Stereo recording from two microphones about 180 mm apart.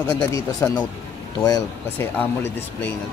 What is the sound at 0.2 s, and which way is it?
Speech, 20° left (ahead or behind).